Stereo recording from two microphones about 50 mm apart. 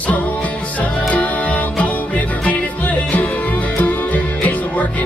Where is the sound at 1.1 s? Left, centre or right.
Left.